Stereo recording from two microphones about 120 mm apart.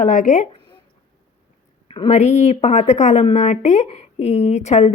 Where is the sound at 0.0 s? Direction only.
90° left.